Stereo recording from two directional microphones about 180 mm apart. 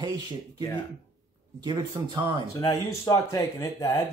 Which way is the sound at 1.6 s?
25° right (ahead or behind).